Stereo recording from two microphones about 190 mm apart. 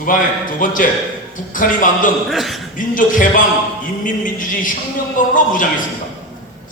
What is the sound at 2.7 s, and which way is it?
A man's voice, 45° left (ahead or behind).